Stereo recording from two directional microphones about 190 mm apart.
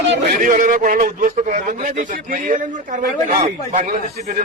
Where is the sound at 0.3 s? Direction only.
45° right (ahead or behind).